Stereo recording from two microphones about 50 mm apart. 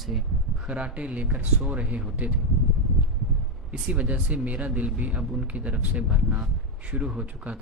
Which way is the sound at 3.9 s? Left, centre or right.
Right.